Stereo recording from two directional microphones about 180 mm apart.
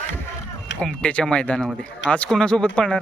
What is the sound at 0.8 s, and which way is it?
Speech, 5° left (ahead or behind).